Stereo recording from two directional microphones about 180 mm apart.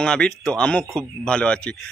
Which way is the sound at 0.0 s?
5° left (ahead or behind).